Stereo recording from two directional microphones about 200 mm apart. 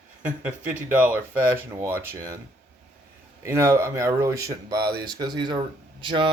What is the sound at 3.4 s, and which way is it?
Speech, 15° right (ahead or behind).